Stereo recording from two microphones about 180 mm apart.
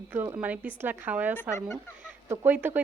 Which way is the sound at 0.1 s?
10° right (ahead or behind).